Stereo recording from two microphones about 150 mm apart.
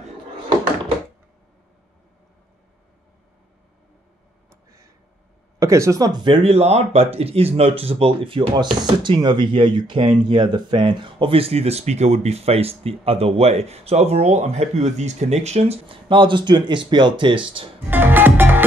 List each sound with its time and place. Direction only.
4.5 s a sound: 20° right (ahead or behind)
5.6 s speech: 20° right (ahead or behind)
17.8 s music: 15° right (ahead or behind)